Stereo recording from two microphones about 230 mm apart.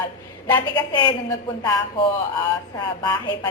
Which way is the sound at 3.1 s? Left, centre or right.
Centre.